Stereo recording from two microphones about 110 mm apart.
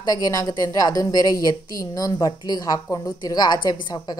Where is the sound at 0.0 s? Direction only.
35° left (ahead or behind).